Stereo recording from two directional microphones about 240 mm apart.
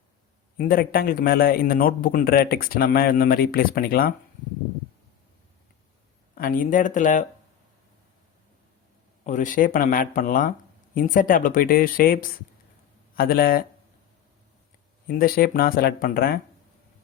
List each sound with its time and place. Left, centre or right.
0.5 s a man's voice: left
6.3 s a man's voice: left
9.2 s a man's voice: left
15.0 s a man's voice: left